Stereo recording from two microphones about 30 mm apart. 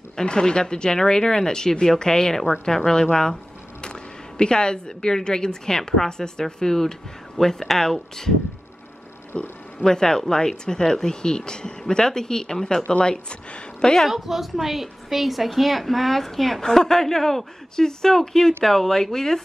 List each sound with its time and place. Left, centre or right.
0.2 s a woman's voice: left; by 8.4 s centre
9.3 s speech: left
14.1 s a woman's voice: centre
16.6 s speech: centre